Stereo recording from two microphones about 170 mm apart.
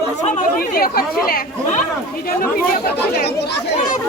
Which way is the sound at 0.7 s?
60° left (ahead or behind).